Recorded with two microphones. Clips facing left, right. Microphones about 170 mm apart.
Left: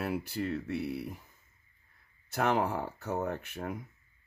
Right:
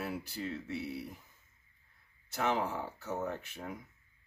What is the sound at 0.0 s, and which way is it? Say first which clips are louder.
Speech: left 5 dB; 60° left (ahead or behind).